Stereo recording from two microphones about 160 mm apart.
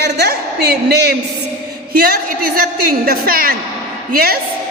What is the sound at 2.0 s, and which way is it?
A woman's voice, 65° right (ahead or behind).